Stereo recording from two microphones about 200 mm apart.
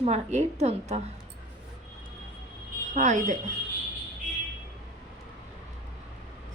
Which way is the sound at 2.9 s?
40° right (ahead or behind).